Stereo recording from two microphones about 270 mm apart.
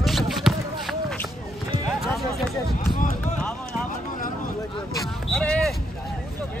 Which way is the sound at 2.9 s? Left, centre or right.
Left.